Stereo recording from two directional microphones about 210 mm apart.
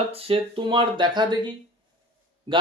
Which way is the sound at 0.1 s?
25° right (ahead or behind).